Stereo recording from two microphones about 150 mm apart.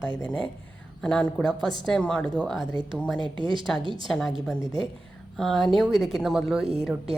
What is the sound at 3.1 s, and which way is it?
Speech, 35° right (ahead or behind).